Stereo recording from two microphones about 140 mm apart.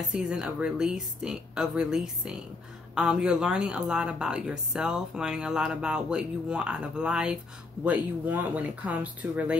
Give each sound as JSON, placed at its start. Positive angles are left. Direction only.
{"t": 0.1, "sound": "speech", "side_deg": -5}